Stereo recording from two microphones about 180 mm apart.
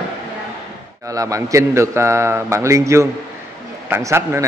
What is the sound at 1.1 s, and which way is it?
Speech, 20° right (ahead or behind).